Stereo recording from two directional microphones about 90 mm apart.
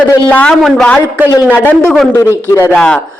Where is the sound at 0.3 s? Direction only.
20° left (ahead or behind).